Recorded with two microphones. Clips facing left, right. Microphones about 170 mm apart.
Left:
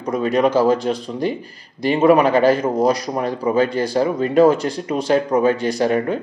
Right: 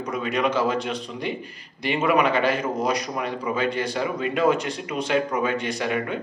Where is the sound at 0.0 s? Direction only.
35° left (ahead or behind).